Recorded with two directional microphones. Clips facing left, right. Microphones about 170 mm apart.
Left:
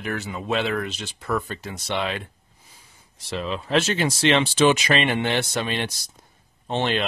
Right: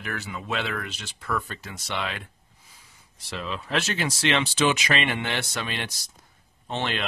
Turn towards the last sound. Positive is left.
turn(degrees=25)  # may be behind; listen again after turning